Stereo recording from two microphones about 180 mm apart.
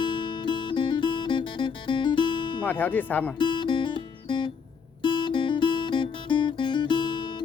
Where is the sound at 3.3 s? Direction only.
25° left (ahead or behind).